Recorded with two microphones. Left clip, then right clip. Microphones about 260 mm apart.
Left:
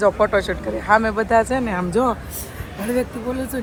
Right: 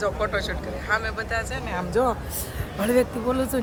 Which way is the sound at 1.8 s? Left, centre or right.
Left.